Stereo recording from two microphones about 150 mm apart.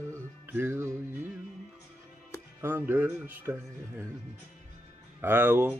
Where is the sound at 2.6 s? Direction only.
15° right (ahead or behind).